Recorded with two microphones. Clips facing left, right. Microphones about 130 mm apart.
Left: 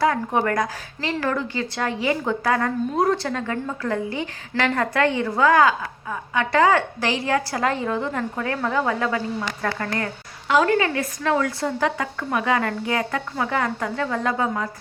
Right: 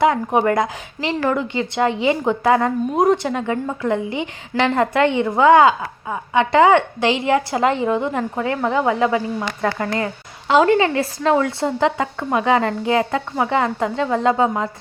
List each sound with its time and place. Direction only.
0.0 s a woman's voice: 20° right (ahead or behind)